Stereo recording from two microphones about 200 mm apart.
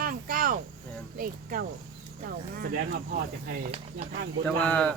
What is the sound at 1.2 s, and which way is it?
Speech, 45° right (ahead or behind).